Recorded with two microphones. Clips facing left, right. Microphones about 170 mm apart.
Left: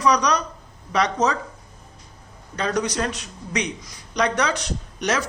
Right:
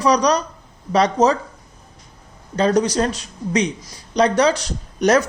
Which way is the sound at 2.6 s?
30° right (ahead or behind).